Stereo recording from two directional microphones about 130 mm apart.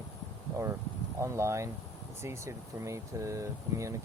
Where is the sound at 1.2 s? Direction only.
20° right (ahead or behind).